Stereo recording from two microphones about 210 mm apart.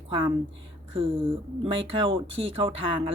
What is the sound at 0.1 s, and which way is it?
A woman's voice, 25° right (ahead or behind).